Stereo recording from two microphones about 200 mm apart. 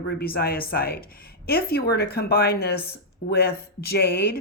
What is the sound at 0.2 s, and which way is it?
A woman's voice, 50° left (ahead or behind).